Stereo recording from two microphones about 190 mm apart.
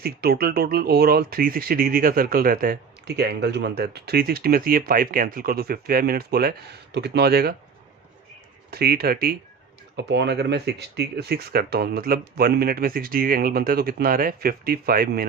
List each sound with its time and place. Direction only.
0.0 s speech: 55° right (ahead or behind)
8.7 s speech: 55° right (ahead or behind)
9.9 s speech: 65° right (ahead or behind)